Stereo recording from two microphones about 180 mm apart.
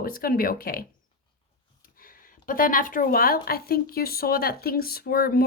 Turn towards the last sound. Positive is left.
turn(degrees=60)  # may be behind; listen again after turning